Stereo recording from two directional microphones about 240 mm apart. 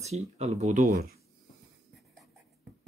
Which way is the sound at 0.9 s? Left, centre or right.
Right.